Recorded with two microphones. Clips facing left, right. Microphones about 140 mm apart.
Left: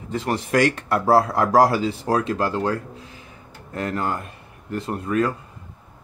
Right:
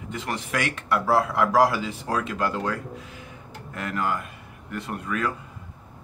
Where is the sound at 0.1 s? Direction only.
35° left (ahead or behind).